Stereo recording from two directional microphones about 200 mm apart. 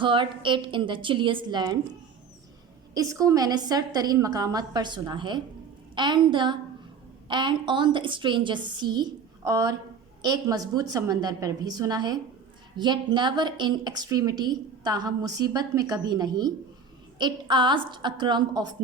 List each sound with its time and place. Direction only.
0.0 s a woman's voice: 25° right (ahead or behind)
2.9 s a woman's voice: 15° right (ahead or behind)